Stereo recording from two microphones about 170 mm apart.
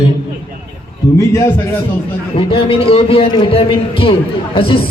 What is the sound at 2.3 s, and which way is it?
A man's voice, 35° left (ahead or behind).